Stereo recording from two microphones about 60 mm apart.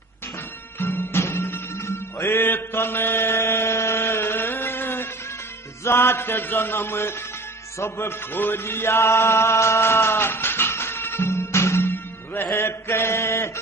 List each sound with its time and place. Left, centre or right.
0.7 s music: left
8.3 s music: left